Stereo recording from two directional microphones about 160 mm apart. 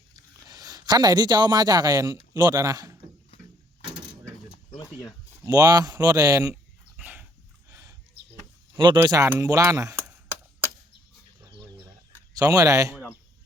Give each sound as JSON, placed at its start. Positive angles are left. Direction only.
{"t": 0.4, "sound": "speech", "side_deg": -25}
{"t": 4.8, "sound": "a sound", "side_deg": 20}
{"t": 5.3, "sound": "a man's voice", "side_deg": -20}
{"t": 7.0, "sound": "dog", "side_deg": -10}
{"t": 7.7, "sound": "a sound", "side_deg": -20}
{"t": 9.0, "sound": "a man's voice", "side_deg": -20}
{"t": 12.4, "sound": "a man's voice", "side_deg": -20}